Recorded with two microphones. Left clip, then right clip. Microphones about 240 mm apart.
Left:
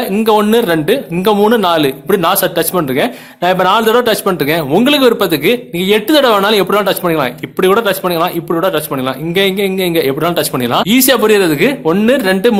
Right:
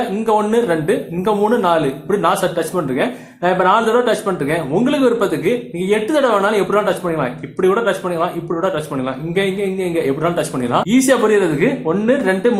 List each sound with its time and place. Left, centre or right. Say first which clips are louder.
0.3 s speech: left 5 dB; left